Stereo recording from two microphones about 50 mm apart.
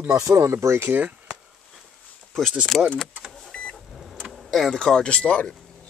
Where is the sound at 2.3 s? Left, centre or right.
Centre.